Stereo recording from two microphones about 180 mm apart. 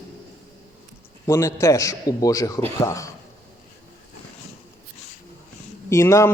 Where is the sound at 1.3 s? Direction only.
15° left (ahead or behind).